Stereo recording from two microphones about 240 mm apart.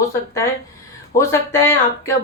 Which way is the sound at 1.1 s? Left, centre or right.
Centre.